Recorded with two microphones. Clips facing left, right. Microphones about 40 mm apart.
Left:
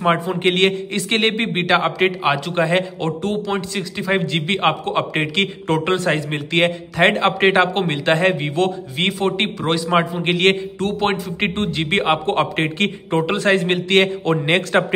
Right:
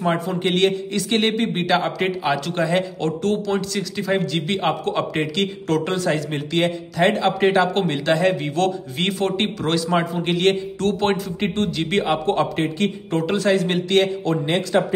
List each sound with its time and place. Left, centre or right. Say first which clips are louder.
0.4 s a man's voice: left 2 dB; left
2.3 s a man's voice: left 2 dB; left
3.1 s a man's voice: even; centre
4.1 s a man's voice: left 2 dB; left
7.7 s a man's voice: left 1 dB; left
8.1 s a man's voice: left 2 dB; left
8.4 s a man's voice: left 1 dB; left
10.3 s a man's voice: left 2 dB; left
10.8 s a man's voice: even; centre
11.5 s a man's voice: even; left
13.1 s a man's voice: left 2 dB; left
14.4 s a man's voice: left 3 dB; left